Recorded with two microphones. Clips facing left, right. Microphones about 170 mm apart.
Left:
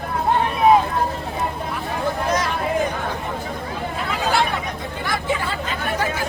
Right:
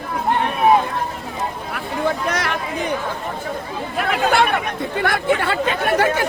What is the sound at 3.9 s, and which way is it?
Speech, 65° right (ahead or behind).